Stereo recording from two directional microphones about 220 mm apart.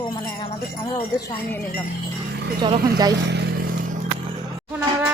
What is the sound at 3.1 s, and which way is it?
Speech, 50° right (ahead or behind).